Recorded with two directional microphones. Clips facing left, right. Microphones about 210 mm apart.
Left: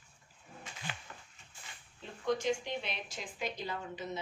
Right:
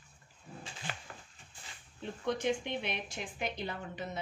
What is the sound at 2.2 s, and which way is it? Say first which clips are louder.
Speech: even; 55° right (ahead or behind).